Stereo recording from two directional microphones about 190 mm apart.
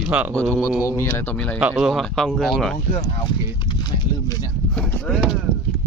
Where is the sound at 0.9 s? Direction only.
10° left (ahead or behind).